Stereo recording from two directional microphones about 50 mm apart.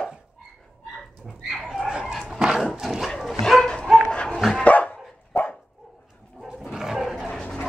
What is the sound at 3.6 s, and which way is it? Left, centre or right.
Dog, centre.